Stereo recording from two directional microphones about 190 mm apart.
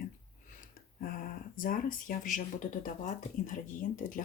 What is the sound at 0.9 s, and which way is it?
Speech, 45° left (ahead or behind).